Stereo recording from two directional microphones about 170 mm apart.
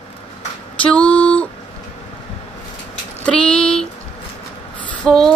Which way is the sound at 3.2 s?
5° left (ahead or behind).